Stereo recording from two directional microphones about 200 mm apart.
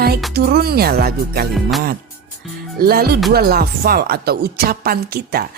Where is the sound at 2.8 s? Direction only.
50° right (ahead or behind).